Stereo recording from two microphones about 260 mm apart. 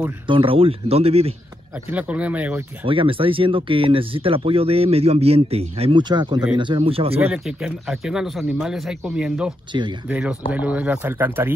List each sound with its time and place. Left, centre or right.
0.3 s speech: centre
1.9 s speech: centre
2.8 s speech: centre
7.2 s speech: centre
9.7 s speech: centre
10.0 s speech: centre